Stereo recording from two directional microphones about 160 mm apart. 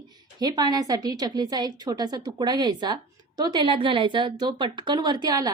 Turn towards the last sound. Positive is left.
turn(degrees=-25)  # may be behind; listen again after turning